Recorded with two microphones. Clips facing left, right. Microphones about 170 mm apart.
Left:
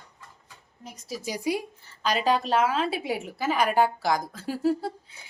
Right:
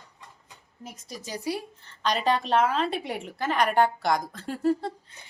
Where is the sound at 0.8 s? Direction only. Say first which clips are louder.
Left 5 dB; centre (ahead or behind).